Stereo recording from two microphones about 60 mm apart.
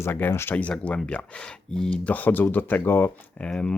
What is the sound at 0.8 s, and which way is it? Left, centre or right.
Speech, centre.